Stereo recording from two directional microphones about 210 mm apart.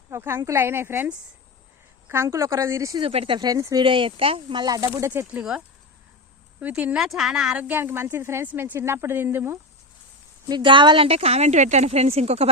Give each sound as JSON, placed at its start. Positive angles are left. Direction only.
{"t": 0.1, "sound": "speech", "side_deg": -10}
{"t": 3.0, "sound": "speech", "side_deg": -25}
{"t": 10.5, "sound": "speech", "side_deg": -20}